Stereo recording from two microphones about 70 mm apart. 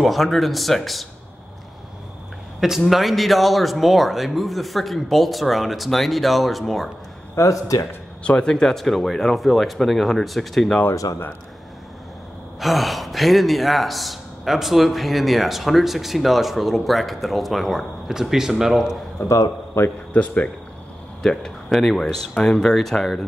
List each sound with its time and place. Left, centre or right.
0.0 s a man's voice: centre
2.8 s a man's voice: centre
7.3 s a man's voice: left
8.2 s a man's voice: centre
12.5 s a man's voice: centre
19.1 s a man's voice: left
19.7 s a man's voice: left
20.1 s speech: centre
21.2 s a man's voice: centre